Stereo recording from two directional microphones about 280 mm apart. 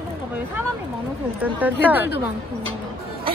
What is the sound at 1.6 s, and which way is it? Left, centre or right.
Speech, centre.